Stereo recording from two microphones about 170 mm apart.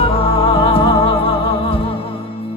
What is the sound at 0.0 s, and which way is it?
Music, 35° left (ahead or behind).